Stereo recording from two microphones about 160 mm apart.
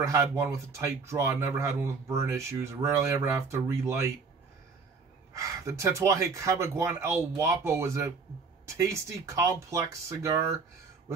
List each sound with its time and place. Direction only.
0.0 s speech: 15° right (ahead or behind)
5.3 s speech: 20° right (ahead or behind)